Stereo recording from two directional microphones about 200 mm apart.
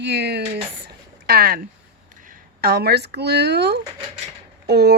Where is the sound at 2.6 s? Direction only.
50° right (ahead or behind).